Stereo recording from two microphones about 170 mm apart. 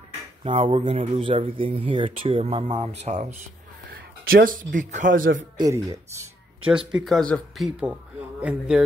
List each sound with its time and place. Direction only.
0.4 s speech: 35° right (ahead or behind)
3.9 s a sound: 60° right (ahead or behind)
4.7 s speech: 50° right (ahead or behind)
5.6 s speech: 20° right (ahead or behind)
6.9 s a man's voice: centre (ahead or behind)